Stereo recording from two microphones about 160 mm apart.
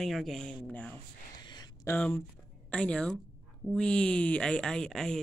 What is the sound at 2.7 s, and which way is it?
Speech, 5° left (ahead or behind).